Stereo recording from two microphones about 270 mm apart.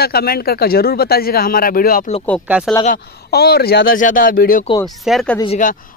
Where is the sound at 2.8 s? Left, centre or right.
Left.